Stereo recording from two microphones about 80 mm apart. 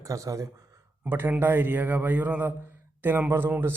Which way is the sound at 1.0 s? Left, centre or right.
Right.